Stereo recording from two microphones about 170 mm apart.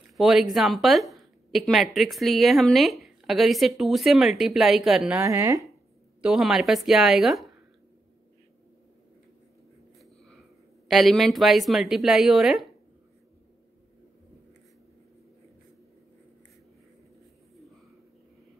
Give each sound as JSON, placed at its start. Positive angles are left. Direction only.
{"t": 0.2, "sound": "a woman's voice", "side_deg": 0}
{"t": 5.2, "sound": "speech", "side_deg": -20}
{"t": 6.2, "sound": "a woman's voice", "side_deg": -5}
{"t": 10.0, "sound": "a sound", "side_deg": 0}
{"t": 10.9, "sound": "a woman's voice", "side_deg": 0}